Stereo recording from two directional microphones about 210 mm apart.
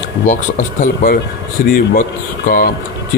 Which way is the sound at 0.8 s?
40° left (ahead or behind).